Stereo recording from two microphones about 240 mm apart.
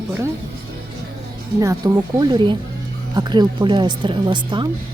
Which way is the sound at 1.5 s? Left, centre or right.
Centre.